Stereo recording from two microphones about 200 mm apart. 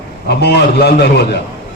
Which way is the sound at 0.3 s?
55° left (ahead or behind).